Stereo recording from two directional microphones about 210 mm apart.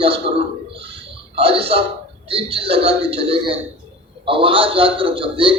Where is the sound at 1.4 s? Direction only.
25° right (ahead or behind).